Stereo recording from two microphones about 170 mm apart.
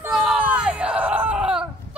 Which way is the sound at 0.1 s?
5° right (ahead or behind).